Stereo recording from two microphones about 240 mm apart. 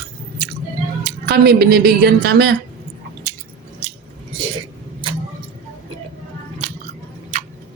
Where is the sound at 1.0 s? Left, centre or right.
Right.